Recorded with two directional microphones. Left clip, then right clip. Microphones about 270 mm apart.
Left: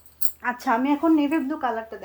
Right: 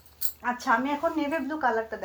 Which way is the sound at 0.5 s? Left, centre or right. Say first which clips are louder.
Left 3 dB; left.